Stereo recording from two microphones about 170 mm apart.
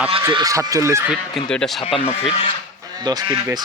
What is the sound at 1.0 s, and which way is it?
Speech, 5° right (ahead or behind).